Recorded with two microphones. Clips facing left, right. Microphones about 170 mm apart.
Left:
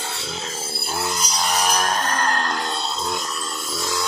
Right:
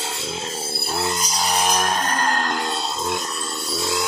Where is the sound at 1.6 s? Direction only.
25° right (ahead or behind).